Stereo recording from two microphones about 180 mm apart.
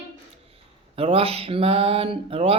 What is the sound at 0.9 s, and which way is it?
Speech, 30° right (ahead or behind).